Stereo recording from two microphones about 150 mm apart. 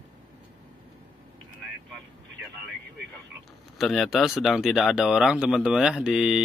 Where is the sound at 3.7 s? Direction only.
Centre (ahead or behind).